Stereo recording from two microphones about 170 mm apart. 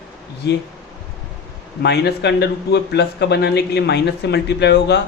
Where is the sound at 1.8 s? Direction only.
85° left.